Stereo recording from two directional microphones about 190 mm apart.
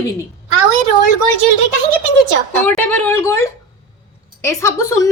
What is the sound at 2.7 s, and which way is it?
A woman's voice, 10° left (ahead or behind).